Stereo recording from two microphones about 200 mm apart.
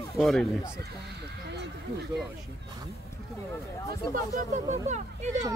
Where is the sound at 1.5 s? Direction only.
55° right (ahead or behind).